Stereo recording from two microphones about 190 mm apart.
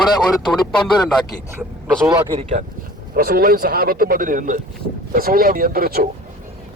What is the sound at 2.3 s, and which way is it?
Speech, 35° right (ahead or behind).